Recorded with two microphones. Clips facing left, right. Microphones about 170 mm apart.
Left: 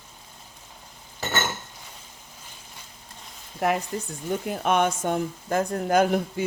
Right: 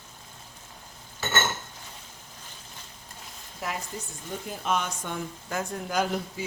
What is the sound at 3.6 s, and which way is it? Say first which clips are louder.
Speech: left 10 dB; 60° left (ahead or behind).